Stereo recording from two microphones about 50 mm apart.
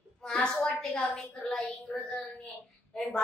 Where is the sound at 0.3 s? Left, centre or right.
Centre.